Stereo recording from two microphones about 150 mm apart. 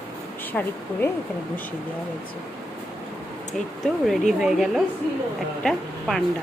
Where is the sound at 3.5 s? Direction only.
5° left (ahead or behind).